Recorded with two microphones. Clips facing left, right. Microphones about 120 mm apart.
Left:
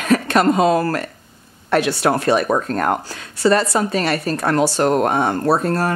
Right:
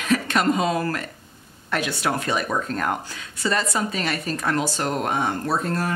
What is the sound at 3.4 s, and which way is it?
A woman's voice, 65° left (ahead or behind).